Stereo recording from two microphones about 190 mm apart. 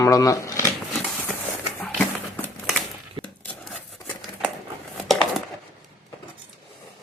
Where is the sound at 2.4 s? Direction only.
5° left (ahead or behind).